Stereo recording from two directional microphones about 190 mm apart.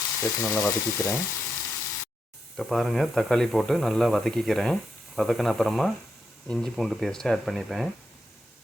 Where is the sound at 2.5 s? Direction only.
Centre (ahead or behind).